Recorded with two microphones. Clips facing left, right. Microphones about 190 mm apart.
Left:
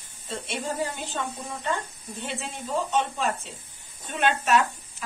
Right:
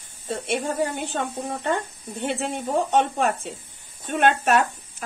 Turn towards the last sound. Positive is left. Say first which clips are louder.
# right 1 dB
turn(degrees=-50)  # may be behind; listen again after turning